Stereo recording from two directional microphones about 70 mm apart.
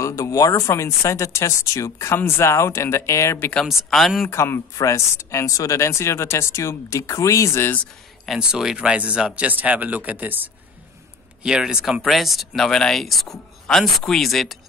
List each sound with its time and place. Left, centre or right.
0.0 s speech: left
3.9 s speech: centre
4.3 s speech: left
8.4 s speech: centre; by 10.5 s right
11.4 s speech: centre